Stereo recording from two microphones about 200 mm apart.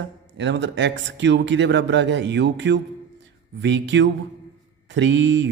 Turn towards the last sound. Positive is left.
turn(degrees=-65)  # may be behind; listen again after turning